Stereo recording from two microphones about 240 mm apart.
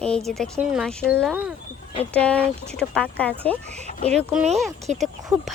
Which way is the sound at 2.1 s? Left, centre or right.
Centre.